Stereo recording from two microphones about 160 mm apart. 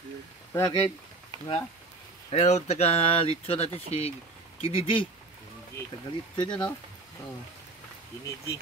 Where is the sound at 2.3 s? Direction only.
45° left (ahead or behind).